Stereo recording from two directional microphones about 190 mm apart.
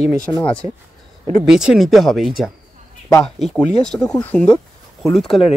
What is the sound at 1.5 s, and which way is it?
Speech, 5° right (ahead or behind).